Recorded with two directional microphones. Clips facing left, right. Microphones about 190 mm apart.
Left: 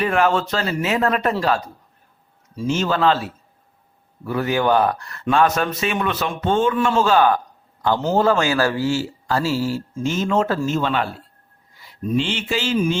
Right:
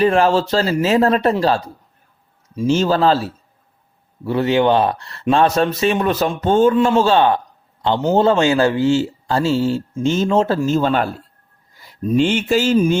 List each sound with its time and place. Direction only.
0.0 s a man's voice: 30° right (ahead or behind)